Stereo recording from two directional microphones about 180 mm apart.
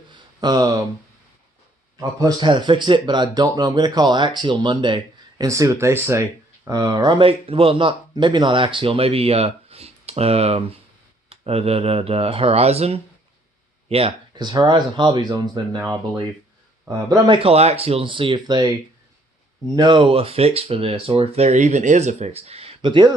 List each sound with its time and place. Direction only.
0.1 s a sound: 20° right (ahead or behind)
2.0 s speech: 20° right (ahead or behind)
17.2 s speech: 30° right (ahead or behind)